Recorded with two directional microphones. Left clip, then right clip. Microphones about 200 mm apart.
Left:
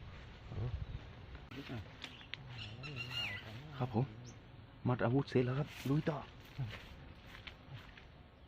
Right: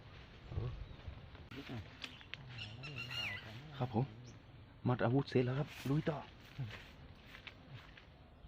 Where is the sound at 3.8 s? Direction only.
15° right (ahead or behind).